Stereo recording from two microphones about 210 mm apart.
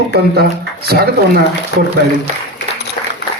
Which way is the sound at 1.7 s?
55° left (ahead or behind).